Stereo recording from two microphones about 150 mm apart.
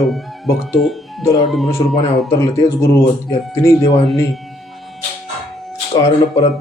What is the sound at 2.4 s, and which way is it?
A man's voice, 20° left (ahead or behind).